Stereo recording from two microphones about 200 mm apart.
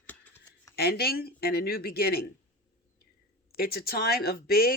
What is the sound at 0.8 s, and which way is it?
Speech, 50° left (ahead or behind).